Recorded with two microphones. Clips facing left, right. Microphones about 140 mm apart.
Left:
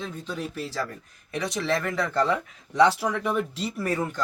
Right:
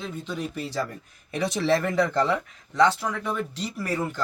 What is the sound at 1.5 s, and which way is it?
Speech, 25° right (ahead or behind).